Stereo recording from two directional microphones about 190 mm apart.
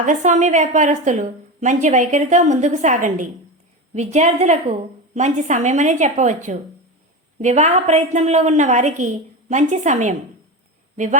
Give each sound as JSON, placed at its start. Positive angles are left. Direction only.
{"t": 0.0, "sound": "a woman's voice", "side_deg": -40}